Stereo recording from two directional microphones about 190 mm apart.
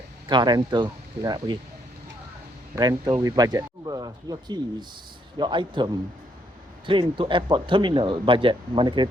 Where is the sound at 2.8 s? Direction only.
20° right (ahead or behind).